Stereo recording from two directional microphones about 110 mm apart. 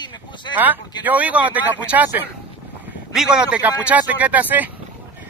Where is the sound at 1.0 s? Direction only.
15° right (ahead or behind).